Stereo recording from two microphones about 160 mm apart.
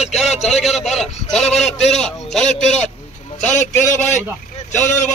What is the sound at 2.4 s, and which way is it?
Speech, 45° left (ahead or behind).